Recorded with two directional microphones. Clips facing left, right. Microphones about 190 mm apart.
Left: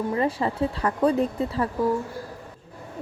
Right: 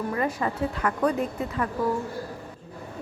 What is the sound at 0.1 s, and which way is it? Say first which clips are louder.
Speech: left 3 dB; 30° left (ahead or behind).